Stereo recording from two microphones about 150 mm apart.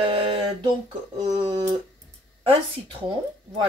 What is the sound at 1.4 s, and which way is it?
Speech, 30° right (ahead or behind).